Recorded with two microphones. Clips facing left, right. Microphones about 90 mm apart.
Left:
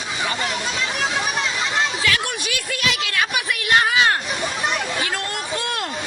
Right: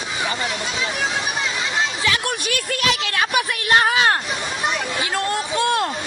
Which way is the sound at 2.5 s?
40° right (ahead or behind).